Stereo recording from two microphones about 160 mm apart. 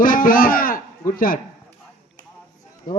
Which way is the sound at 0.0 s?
60° left (ahead or behind).